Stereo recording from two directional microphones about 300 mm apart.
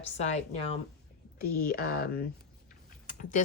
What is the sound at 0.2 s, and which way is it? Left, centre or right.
Speech, left.